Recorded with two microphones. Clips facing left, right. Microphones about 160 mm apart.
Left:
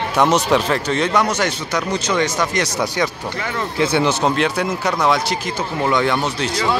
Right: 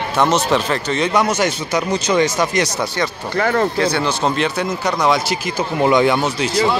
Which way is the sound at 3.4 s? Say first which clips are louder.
Right 10 dB; 50° right (ahead or behind).